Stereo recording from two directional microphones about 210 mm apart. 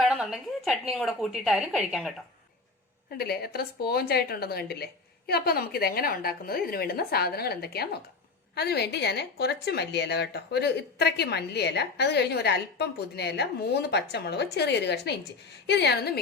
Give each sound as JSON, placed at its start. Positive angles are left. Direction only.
{"t": 0.0, "sound": "a woman's voice", "side_deg": 0}
{"t": 3.1, "sound": "a woman's voice", "side_deg": 50}